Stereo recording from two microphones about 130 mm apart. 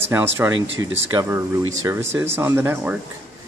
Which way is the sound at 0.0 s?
15° right (ahead or behind).